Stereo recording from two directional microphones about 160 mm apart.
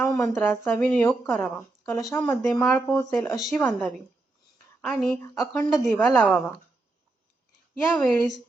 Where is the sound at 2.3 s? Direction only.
Centre (ahead or behind).